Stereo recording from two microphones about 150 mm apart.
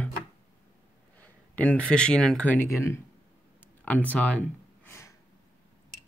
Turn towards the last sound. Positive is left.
turn(degrees=20)  # may be behind; listen again after turning